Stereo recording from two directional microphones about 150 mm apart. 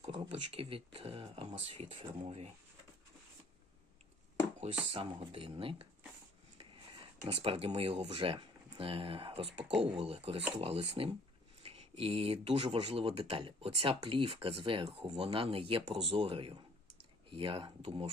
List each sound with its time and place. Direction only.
0.0 s speech: 45° right (ahead or behind)
4.9 s speech: 40° right (ahead or behind)
7.3 s speech: 40° right (ahead or behind)